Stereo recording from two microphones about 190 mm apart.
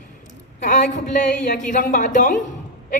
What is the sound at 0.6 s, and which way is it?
A woman's voice, 40° left (ahead or behind).